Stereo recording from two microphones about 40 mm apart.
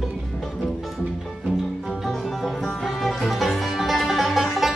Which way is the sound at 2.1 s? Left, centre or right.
Centre.